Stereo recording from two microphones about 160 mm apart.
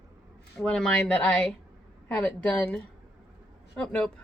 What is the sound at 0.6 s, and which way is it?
Speech, 5° left (ahead or behind).